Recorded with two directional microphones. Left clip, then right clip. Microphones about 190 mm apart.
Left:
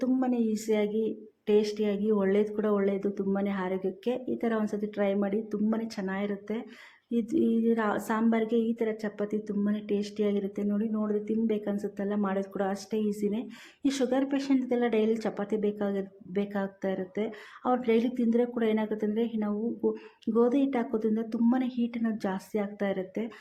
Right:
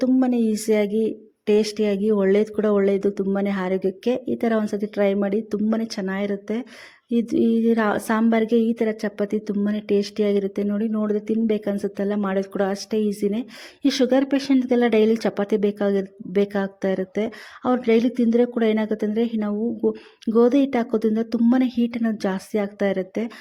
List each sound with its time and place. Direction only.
0.0 s speech: 40° right (ahead or behind)